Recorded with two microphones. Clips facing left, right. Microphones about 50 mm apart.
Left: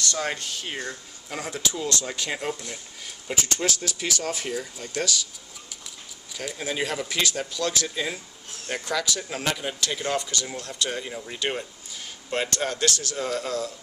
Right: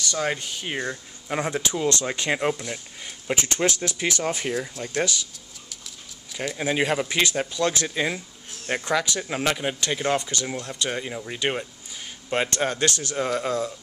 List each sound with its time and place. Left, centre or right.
0.0 s speech: centre; by 5.1 s right
6.6 s speech: right